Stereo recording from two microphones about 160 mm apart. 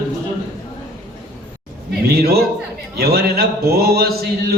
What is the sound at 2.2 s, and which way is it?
Speech, 75° right (ahead or behind).